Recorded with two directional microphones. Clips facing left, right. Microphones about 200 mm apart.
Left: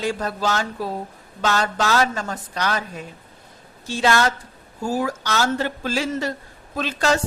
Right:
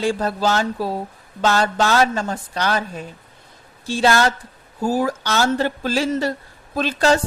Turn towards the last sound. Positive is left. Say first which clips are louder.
# right 4 dB
turn(degrees=-35)  # may be behind; listen again after turning